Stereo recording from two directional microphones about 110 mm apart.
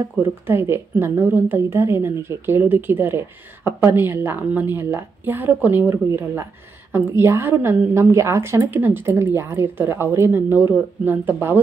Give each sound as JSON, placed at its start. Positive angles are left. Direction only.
{"t": 0.1, "sound": "a woman's voice", "side_deg": -20}